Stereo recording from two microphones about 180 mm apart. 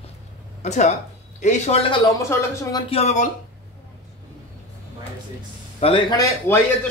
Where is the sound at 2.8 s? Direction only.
35° left (ahead or behind).